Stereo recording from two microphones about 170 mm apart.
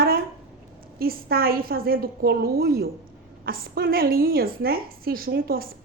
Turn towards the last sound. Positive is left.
turn(degrees=-60)  # may be behind; listen again after turning